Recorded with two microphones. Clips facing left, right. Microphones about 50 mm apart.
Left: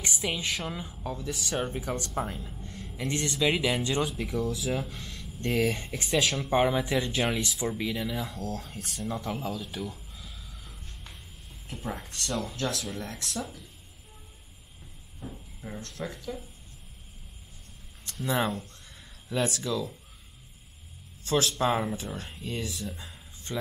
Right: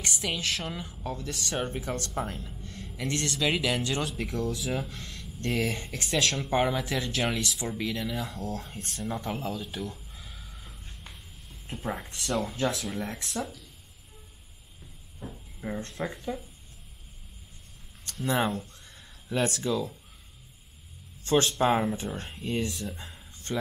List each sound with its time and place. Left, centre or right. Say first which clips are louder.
0.0 s speech: even; centre
10.1 s gasp: even; centre
11.8 s speech: right 2 dB; centre
15.2 s a sound: even; centre
15.6 s speech: right 4 dB; right
18.0 s speech: right 1 dB; centre
21.3 s speech: right 2 dB; centre